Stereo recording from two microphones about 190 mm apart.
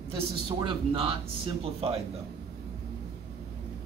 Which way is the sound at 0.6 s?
25° right (ahead or behind).